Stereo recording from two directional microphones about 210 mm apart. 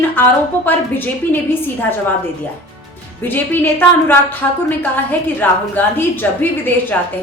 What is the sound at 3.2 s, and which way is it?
A woman's voice, 10° left (ahead or behind).